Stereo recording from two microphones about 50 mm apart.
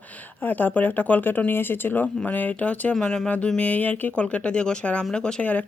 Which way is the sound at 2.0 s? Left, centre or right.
Left.